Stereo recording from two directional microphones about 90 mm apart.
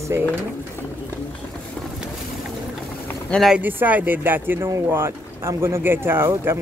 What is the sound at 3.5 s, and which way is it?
Speech, 20° right (ahead or behind).